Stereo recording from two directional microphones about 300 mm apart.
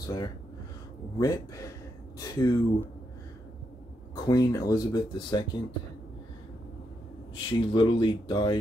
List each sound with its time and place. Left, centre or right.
0.0 s speech: centre
4.1 s speech: centre
7.3 s speech: centre